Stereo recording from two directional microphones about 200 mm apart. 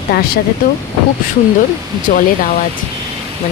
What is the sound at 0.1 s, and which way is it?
Speech, 50° left (ahead or behind).